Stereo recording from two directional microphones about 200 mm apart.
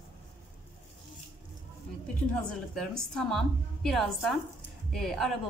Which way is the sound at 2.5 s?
Centre (ahead or behind).